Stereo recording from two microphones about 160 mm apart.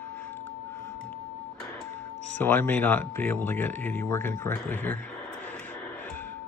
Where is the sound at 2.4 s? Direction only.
10° left (ahead or behind).